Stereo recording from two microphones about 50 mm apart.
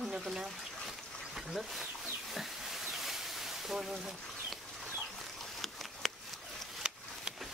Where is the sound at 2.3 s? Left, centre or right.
Centre.